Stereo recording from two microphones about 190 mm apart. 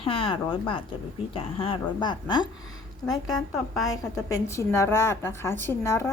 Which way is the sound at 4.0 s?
15° left (ahead or behind).